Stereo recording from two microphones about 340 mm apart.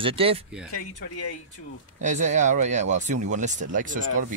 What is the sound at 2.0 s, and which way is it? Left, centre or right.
Speech, right.